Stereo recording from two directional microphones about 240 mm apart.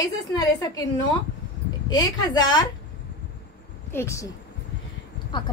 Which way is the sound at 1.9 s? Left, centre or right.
Centre.